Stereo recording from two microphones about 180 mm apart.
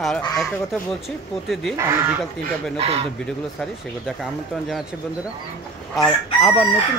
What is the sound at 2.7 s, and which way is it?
Speech, 35° right (ahead or behind).